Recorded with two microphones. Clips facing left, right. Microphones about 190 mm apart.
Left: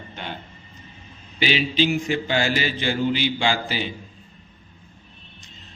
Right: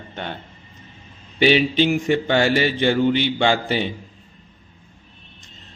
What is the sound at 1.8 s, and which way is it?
Speech, 55° right (ahead or behind).